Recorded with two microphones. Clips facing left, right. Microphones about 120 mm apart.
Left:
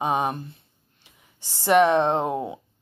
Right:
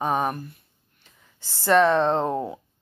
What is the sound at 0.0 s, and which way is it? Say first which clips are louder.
Speech: even; 20° left (ahead or behind).